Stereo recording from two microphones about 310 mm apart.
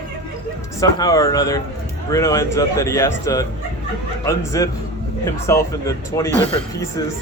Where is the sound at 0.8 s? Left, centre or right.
Centre.